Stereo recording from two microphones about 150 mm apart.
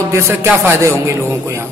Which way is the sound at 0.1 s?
15° right (ahead or behind).